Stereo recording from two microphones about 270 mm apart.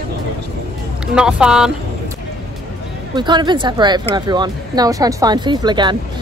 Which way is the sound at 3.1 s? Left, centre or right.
Centre.